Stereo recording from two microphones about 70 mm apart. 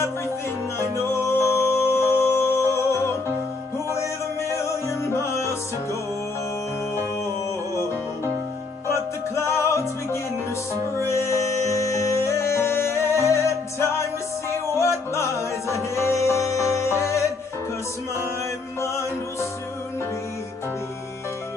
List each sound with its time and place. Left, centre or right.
0.7 s music: left
4.4 s music: left
9.3 s music: left